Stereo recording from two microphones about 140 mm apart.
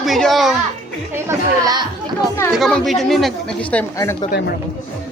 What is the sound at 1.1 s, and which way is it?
Speech, 25° right (ahead or behind).